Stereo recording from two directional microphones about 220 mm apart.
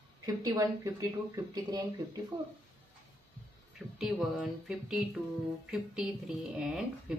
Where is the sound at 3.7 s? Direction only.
Centre (ahead or behind).